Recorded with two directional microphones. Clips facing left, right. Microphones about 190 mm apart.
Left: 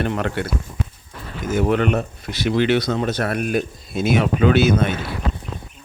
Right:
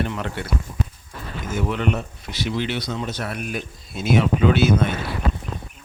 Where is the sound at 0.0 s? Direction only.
60° left (ahead or behind).